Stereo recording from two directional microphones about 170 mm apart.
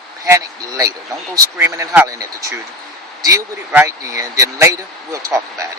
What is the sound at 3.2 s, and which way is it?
Speech, 15° right (ahead or behind).